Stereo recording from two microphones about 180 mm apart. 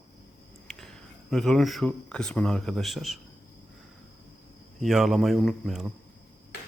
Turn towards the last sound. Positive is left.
turn(degrees=0)  # may be behind; listen again after turning